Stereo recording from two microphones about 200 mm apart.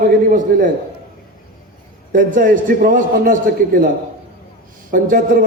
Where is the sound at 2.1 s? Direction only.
40° right (ahead or behind).